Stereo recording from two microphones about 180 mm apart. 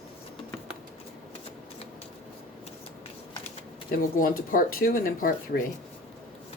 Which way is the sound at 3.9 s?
50° left (ahead or behind).